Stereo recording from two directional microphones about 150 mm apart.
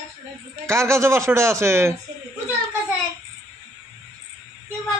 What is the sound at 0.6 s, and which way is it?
Speech, 20° right (ahead or behind).